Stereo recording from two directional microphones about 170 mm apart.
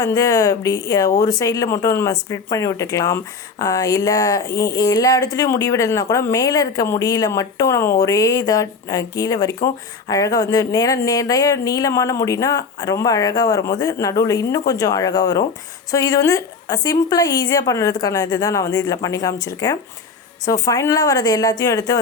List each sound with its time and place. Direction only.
0.0 s speech: 20° left (ahead or behind)